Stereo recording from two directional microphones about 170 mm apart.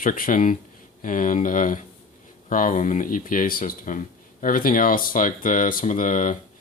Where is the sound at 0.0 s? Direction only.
50° left (ahead or behind).